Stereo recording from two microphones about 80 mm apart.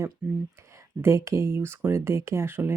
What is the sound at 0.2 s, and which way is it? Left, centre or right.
Speech, centre.